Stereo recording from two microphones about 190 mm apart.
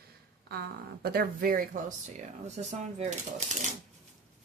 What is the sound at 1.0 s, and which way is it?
Speech, 50° right (ahead or behind).